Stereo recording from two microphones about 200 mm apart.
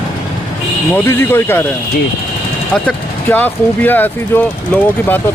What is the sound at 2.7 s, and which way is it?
Speech, 5° left (ahead or behind).